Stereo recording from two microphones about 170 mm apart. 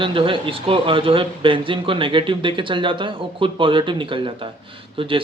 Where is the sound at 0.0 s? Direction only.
30° right (ahead or behind).